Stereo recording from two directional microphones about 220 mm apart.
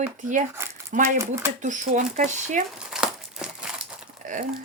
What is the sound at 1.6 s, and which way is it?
Speech, 35° right (ahead or behind).